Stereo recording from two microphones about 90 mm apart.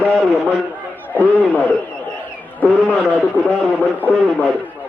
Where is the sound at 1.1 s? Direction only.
20° left (ahead or behind).